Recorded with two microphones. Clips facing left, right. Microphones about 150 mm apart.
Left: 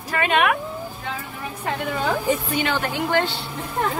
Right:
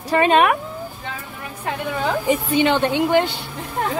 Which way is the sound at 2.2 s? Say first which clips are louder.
Right 5 dB; 20° right (ahead or behind).